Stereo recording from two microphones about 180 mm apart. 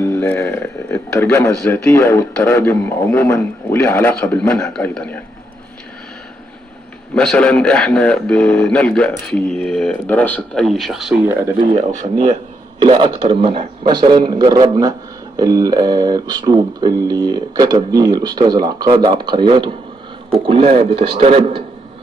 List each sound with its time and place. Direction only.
0.0 s a man's voice: 15° left (ahead or behind)
7.2 s a man's voice: 5° left (ahead or behind)
11.7 s a man's voice: 40° right (ahead or behind)
12.8 s a man's voice: 25° right (ahead or behind)